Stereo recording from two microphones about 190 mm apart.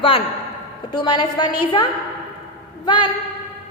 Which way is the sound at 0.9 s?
20° left (ahead or behind).